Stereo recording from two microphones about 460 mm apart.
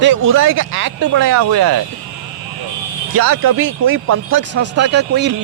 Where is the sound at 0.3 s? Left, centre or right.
Right.